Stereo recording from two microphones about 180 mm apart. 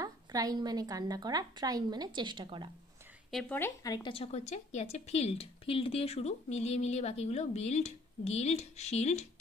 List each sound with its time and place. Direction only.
0.0 s a woman's voice: 20° right (ahead or behind)
3.3 s speech: centre (ahead or behind)
3.5 s speech: 15° left (ahead or behind); by 9.2 s 35° left (ahead or behind)